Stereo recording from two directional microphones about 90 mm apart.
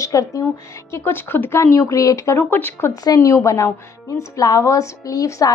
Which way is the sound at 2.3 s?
25° left (ahead or behind).